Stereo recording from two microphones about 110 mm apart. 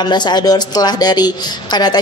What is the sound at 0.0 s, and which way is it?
A woman's voice, 40° left (ahead or behind).